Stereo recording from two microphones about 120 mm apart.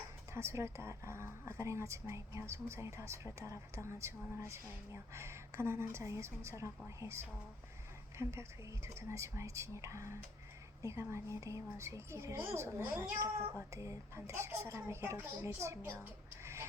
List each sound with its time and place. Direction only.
0.3 s speech: 25° right (ahead or behind)
8.2 s speech: 20° right (ahead or behind)